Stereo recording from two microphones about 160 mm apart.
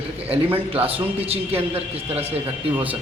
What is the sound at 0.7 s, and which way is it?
Speech, 35° right (ahead or behind).